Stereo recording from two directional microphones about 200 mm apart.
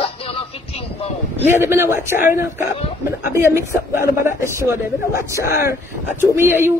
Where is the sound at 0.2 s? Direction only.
30° left (ahead or behind).